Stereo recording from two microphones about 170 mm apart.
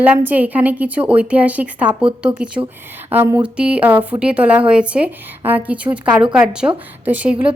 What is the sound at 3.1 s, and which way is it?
A woman's voice, 10° right (ahead or behind).